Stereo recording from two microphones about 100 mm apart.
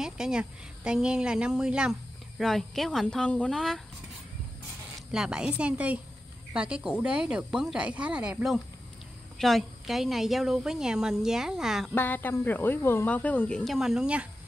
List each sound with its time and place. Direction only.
0.0 s a woman's voice: 5° right (ahead or behind)
5.1 s speech: 5° right (ahead or behind)
9.4 s a woman's voice: centre (ahead or behind)
11.9 s speech: 20° left (ahead or behind)
13.7 s a woman's voice: 5° right (ahead or behind)